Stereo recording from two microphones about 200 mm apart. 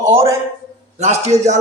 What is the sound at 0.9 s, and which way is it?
Speech, 35° right (ahead or behind).